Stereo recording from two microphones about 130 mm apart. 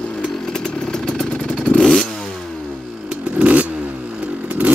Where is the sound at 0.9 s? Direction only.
5° left (ahead or behind).